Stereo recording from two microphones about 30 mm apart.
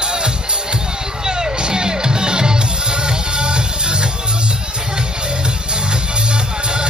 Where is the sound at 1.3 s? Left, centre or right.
Right.